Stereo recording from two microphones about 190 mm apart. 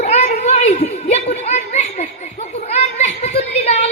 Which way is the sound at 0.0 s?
35° left (ahead or behind).